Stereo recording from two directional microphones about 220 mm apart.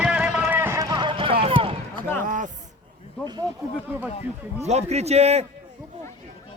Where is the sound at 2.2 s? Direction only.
35° right (ahead or behind).